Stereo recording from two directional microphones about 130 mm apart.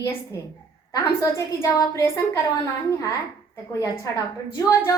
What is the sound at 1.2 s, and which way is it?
A woman's voice, 25° left (ahead or behind).